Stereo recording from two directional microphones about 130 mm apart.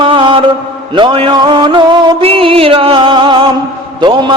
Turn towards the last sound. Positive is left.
turn(degrees=-35)  # may be behind; listen again after turning